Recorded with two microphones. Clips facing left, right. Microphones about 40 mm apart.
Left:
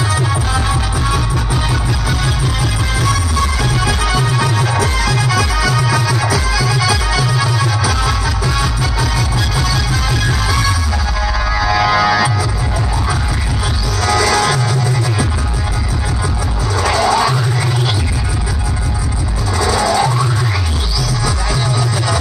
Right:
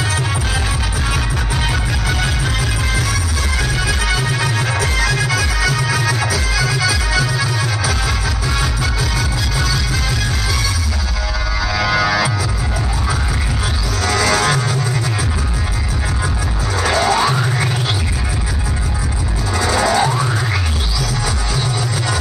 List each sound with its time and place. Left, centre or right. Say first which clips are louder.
3.7 s music: left 3 dB; centre
11.5 s music: left 4 dB; centre
14.0 s music: left 2 dB; centre
16.9 s music: left 1 dB; right
19.5 s music: left 1 dB; centre